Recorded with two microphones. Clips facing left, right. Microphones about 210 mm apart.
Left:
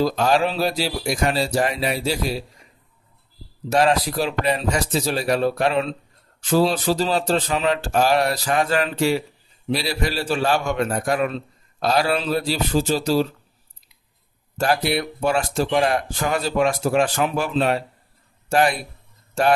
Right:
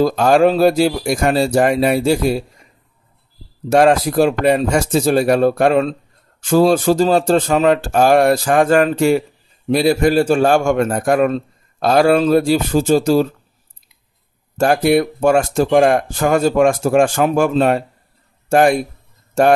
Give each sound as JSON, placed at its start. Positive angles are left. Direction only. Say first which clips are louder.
{"t": 0.0, "sound": "a man's voice", "louder": "right 7 dB", "side_deg": -50}
{"t": 3.6, "sound": "a man's voice", "louder": "right 6 dB", "side_deg": -50}
{"t": 14.6, "sound": "a man's voice", "louder": "right 8 dB", "side_deg": -50}